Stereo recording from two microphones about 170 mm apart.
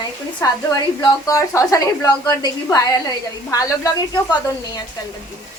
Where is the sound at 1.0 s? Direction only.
20° left (ahead or behind).